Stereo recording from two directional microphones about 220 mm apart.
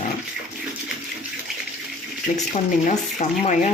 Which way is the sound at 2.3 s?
35° left (ahead or behind).